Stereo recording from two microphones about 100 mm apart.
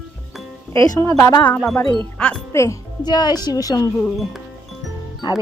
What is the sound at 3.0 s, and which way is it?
Speech, 45° left (ahead or behind).